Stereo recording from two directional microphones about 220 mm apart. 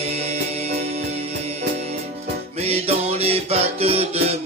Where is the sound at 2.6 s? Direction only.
25° right (ahead or behind).